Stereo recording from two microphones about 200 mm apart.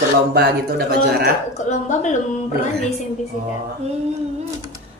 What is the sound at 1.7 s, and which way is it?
Speech, 35° left (ahead or behind).